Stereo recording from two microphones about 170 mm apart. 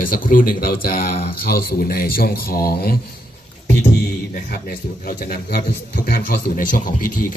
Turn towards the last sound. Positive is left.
turn(degrees=55)  # may be behind; listen again after turning